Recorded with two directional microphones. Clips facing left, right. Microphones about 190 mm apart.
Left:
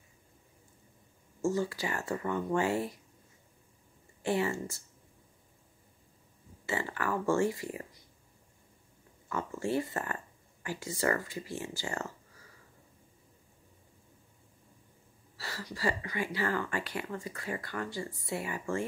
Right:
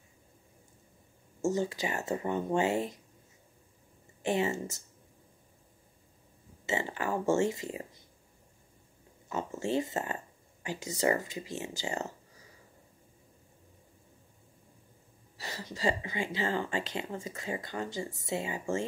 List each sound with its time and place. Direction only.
1.4 s speech: 20° right (ahead or behind)
4.2 s speech: 20° right (ahead or behind)
6.6 s speech: 20° right (ahead or behind)
9.3 s speech: 20° right (ahead or behind)
15.3 s speech: 20° right (ahead or behind)